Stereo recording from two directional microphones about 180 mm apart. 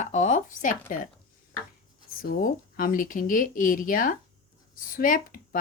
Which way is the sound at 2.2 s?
50° left (ahead or behind).